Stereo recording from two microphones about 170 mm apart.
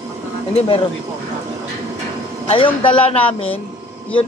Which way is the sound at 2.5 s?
30° left (ahead or behind).